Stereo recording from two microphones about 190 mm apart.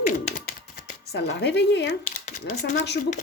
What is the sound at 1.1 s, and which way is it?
Speech, 65° left (ahead or behind).